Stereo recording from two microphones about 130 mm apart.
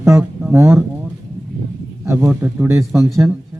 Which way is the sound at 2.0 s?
20° right (ahead or behind).